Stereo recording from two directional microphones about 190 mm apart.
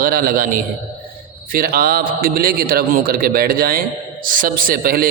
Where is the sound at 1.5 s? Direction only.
50° right (ahead or behind).